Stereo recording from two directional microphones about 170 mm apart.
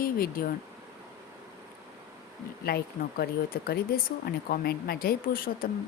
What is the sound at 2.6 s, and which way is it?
Speech, 65° left (ahead or behind).